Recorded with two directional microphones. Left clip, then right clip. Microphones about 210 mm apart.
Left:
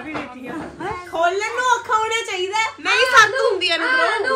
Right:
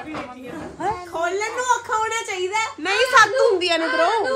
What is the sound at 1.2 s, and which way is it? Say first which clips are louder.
A child's voice: left 7 dB; 40° left (ahead or behind).